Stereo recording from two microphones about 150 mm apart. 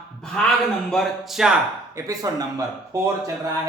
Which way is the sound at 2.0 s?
20° right (ahead or behind).